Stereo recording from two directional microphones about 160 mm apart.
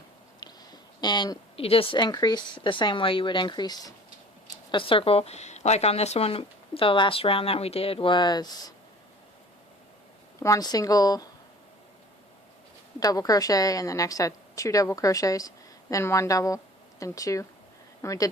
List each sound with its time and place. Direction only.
0.3 s a woman's voice: 25° left (ahead or behind)
10.4 s a woman's voice: 20° left (ahead or behind)
13.0 s a woman's voice: 25° left (ahead or behind)